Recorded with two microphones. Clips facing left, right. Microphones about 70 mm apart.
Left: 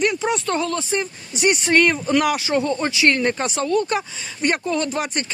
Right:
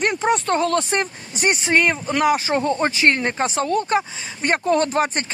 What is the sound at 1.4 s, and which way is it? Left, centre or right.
Speech, right.